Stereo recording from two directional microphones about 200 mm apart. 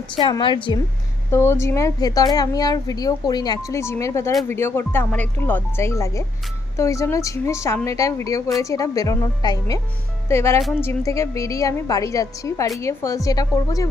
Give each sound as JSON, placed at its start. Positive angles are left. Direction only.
{"t": 0.2, "sound": "a woman's voice", "side_deg": 25}
{"t": 1.3, "sound": "a woman's voice", "side_deg": 15}
{"t": 10.6, "sound": "a woman's voice", "side_deg": 0}
{"t": 10.8, "sound": "a woman's voice", "side_deg": 15}